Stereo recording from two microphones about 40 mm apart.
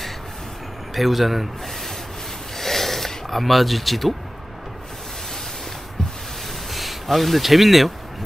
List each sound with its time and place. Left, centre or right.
0.9 s a man's voice: centre
2.5 s a sound: centre
6.7 s speech: centre